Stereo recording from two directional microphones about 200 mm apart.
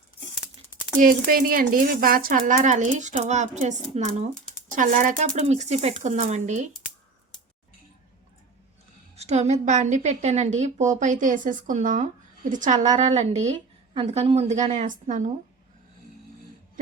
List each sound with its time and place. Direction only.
0.9 s a woman's voice: 45° right (ahead or behind)
9.1 s a woman's voice: 35° right (ahead or behind)